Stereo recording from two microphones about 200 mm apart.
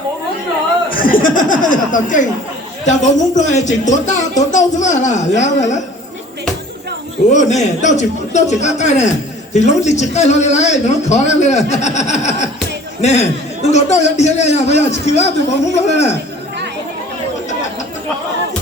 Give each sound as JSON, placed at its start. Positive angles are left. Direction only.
{"t": 0.9, "sound": "chuckle", "side_deg": 45}
{"t": 2.8, "sound": "speech", "side_deg": 35}
{"t": 7.3, "sound": "a man's voice", "side_deg": 35}